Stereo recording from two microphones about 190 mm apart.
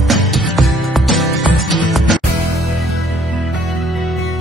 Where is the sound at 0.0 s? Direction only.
Centre (ahead or behind).